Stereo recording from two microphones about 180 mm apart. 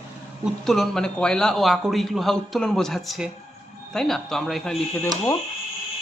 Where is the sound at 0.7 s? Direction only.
Centre (ahead or behind).